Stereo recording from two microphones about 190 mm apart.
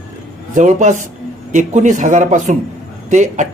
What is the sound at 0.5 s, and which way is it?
Speech, 40° right (ahead or behind).